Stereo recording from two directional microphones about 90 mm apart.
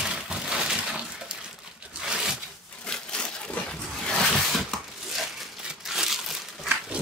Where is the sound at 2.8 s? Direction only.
10° left (ahead or behind).